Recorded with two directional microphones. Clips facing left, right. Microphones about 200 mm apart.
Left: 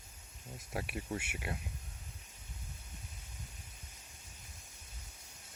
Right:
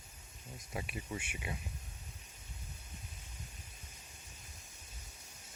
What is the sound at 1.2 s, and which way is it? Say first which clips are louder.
Speech: left 2 dB; 5° left (ahead or behind).